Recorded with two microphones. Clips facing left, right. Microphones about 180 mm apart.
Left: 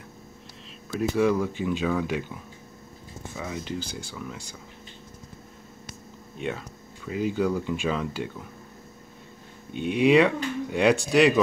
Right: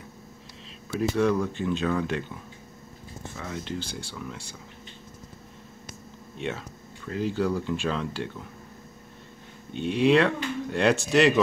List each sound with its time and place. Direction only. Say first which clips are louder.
0.9 s speech: left 1 dB; 5° left (ahead or behind)
3.3 s speech: left 1 dB; 5° left (ahead or behind)
6.3 s speech: left 1 dB; 5° left (ahead or behind)
9.9 s speech: left 2 dB; 10° left (ahead or behind)